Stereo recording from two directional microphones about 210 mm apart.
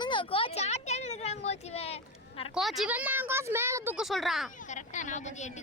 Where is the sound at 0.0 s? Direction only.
25° left (ahead or behind).